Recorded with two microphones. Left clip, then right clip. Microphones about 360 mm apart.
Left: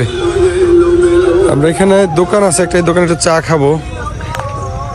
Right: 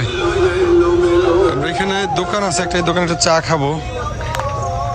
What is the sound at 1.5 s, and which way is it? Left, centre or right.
Speech, centre.